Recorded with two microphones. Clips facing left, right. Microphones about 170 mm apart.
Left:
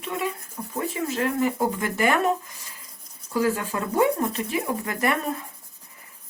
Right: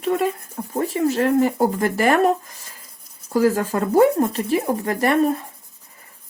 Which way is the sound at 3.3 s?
40° right (ahead or behind).